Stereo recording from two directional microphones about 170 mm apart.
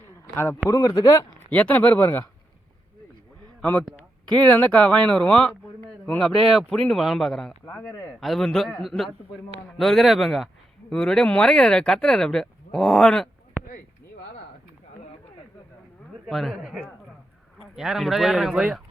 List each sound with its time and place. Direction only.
0.7 s speech: 20° left (ahead or behind)
1.5 s speech: 10° left (ahead or behind)
3.6 s speech: 5° left (ahead or behind)
13.6 s a sound: 15° right (ahead or behind)
16.2 s speech: centre (ahead or behind)